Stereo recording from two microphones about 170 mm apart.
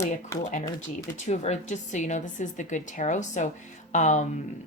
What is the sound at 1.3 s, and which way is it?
A woman's voice, 45° left (ahead or behind).